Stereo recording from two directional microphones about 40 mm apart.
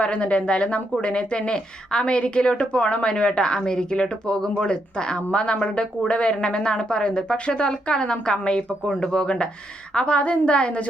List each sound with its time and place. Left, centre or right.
0.0 s a woman's voice: left